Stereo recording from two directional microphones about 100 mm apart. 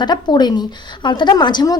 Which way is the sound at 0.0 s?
45° left (ahead or behind).